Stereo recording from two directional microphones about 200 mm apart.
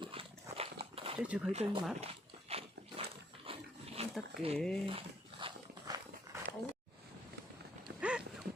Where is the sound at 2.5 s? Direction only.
30° right (ahead or behind).